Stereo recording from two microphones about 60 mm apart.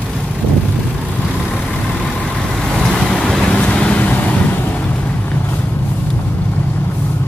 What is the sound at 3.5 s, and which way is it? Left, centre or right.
Vehicle, left.